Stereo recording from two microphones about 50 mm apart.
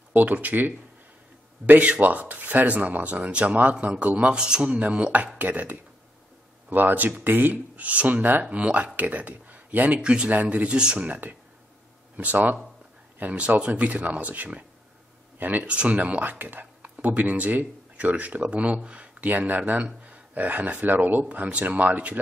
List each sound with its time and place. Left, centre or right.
0.1 s speech: right
7.5 s speech: right
8.5 s speech: right
9.9 s speech: right
11.1 s speech: right
19.2 s speech: right